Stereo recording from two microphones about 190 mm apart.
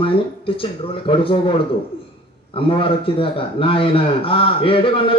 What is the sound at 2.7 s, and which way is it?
Speech, 30° left (ahead or behind).